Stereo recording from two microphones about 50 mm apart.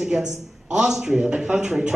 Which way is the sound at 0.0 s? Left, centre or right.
Centre.